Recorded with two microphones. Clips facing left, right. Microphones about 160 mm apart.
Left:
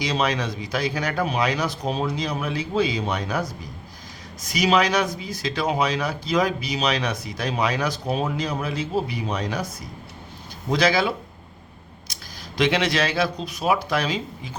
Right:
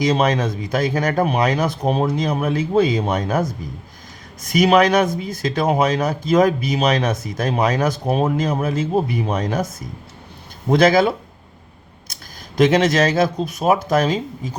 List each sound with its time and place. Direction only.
0.0 s speech: 50° right (ahead or behind)